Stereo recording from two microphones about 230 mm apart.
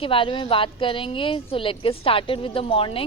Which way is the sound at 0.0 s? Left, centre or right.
Left.